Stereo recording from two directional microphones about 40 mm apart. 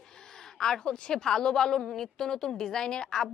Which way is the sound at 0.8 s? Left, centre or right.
Left.